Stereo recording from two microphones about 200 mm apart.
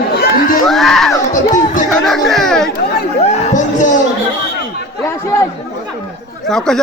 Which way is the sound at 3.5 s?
40° left (ahead or behind).